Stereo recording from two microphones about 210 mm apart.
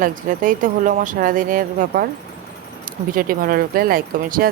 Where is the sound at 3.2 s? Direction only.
40° right (ahead or behind).